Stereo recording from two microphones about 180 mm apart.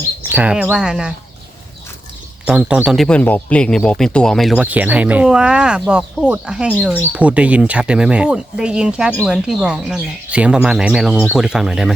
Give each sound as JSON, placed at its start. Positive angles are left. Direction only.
{"t": 0.2, "sound": "speech", "side_deg": -10}
{"t": 2.4, "sound": "speech", "side_deg": -5}